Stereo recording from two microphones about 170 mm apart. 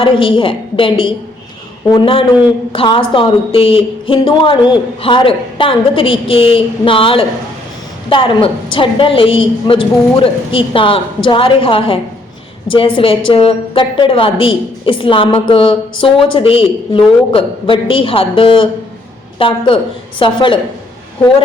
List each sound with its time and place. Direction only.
0.0 s a woman's voice: 30° left (ahead or behind)